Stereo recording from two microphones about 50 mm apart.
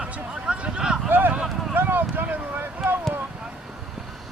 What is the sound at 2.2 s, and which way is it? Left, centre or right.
Boat, right.